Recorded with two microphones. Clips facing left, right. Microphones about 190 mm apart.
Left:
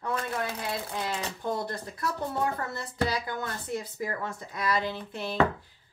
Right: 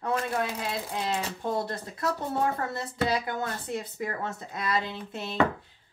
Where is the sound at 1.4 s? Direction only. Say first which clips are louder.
Right 1 dB; 25° right (ahead or behind).